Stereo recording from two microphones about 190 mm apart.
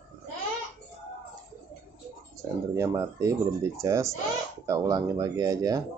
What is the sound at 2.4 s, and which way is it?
Speech, 15° right (ahead or behind).